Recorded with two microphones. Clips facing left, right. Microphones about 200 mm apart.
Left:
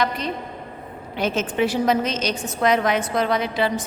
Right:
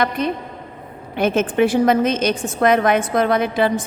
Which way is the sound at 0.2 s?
55° right (ahead or behind).